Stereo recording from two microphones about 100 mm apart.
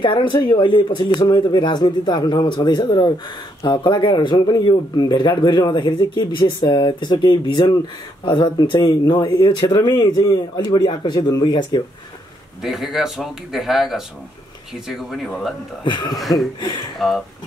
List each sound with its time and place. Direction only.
0.0 s speech: 55° left (ahead or behind)
12.6 s speech: 5° right (ahead or behind)
15.8 s speech: 50° left (ahead or behind)
16.2 s speech: centre (ahead or behind)